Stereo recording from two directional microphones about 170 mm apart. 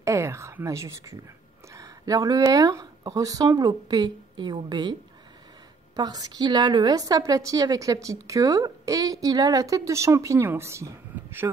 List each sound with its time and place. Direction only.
0.0 s a sound: 15° right (ahead or behind)
1.7 s speech: 20° right (ahead or behind)
5.9 s a woman's voice: 25° right (ahead or behind)